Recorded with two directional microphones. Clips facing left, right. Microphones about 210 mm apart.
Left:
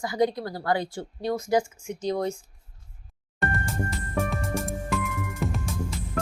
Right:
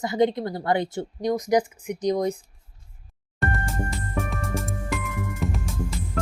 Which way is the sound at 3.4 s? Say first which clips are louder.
Right 1 dB; centre (ahead or behind).